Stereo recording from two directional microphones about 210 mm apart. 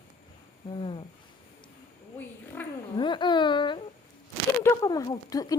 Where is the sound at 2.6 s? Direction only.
10° left (ahead or behind).